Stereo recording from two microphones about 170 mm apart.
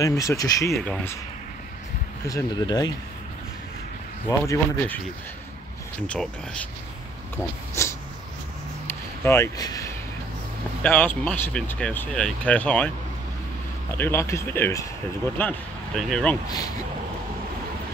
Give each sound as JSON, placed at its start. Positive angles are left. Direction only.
{"t": 0.0, "sound": "speech", "side_deg": 20}
{"t": 2.2, "sound": "speech", "side_deg": 20}
{"t": 4.3, "sound": "speech", "side_deg": 15}
{"t": 6.0, "sound": "speech", "side_deg": 5}
{"t": 7.8, "sound": "a sound", "side_deg": 15}
{"t": 10.8, "sound": "speech", "side_deg": 10}
{"t": 13.9, "sound": "speech", "side_deg": 15}
{"t": 16.4, "sound": "speech", "side_deg": 25}